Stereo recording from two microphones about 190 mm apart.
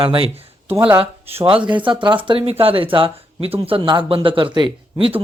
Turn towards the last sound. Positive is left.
turn(degrees=-30)  # may be behind; listen again after turning